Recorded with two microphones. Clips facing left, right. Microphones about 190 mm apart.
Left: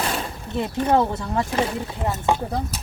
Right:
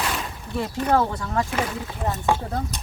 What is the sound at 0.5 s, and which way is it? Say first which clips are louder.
Speech: left 2 dB; 20° left (ahead or behind).